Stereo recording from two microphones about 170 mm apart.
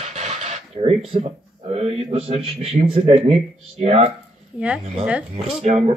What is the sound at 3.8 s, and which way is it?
Speech, 35° right (ahead or behind).